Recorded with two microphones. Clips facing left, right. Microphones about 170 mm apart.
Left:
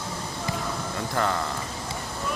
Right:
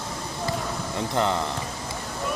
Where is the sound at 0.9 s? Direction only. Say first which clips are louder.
Right 3 dB; 20° right (ahead or behind).